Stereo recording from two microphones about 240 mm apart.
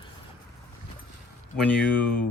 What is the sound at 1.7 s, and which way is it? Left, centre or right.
Speech, centre.